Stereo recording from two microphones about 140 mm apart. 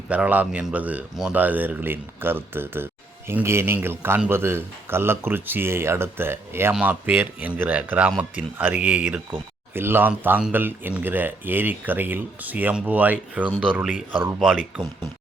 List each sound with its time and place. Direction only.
0.1 s speech: 10° right (ahead or behind)